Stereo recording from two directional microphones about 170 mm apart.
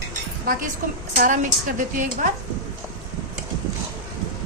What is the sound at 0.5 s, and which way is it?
A woman's voice, 55° right (ahead or behind).